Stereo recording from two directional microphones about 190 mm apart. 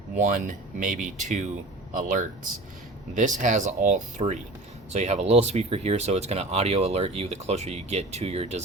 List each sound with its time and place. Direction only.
0.2 s speech: 40° right (ahead or behind)